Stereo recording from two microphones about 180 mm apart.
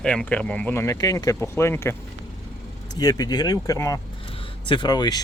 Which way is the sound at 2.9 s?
20° left (ahead or behind).